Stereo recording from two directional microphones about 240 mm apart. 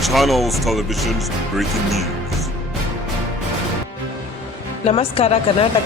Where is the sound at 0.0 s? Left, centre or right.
Centre.